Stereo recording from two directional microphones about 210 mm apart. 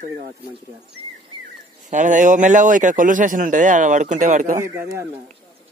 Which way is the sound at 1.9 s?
35° right (ahead or behind).